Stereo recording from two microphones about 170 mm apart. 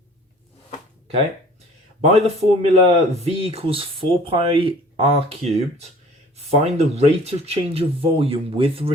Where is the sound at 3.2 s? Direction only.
35° right (ahead or behind).